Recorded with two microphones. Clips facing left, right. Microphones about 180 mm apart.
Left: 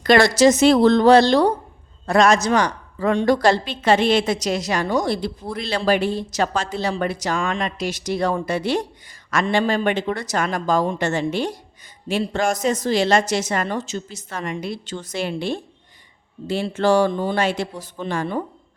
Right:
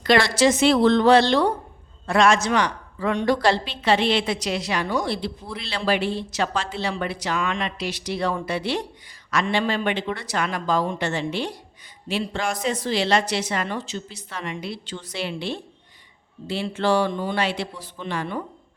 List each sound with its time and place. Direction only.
0.0 s a woman's voice: 45° left (ahead or behind)